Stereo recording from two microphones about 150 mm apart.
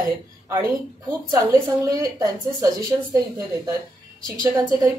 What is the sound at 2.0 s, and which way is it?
Speech, 25° right (ahead or behind).